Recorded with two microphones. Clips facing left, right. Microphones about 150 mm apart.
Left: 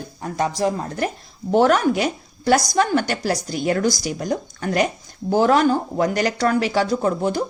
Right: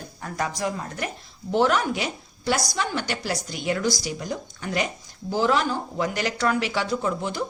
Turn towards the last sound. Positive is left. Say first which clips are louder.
# left 6 dB
turn(degrees=45)  # may be behind; listen again after turning